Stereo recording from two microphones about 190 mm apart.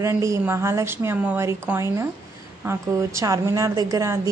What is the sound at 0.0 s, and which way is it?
A woman's voice, 15° right (ahead or behind).